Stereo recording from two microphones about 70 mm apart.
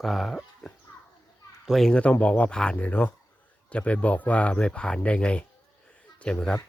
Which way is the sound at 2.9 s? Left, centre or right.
Left.